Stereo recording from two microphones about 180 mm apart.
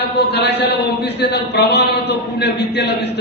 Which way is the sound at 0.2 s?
65° left (ahead or behind).